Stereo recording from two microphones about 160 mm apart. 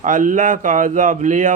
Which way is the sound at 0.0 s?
55° right (ahead or behind).